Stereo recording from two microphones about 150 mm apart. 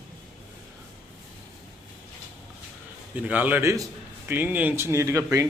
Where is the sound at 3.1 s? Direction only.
10° right (ahead or behind).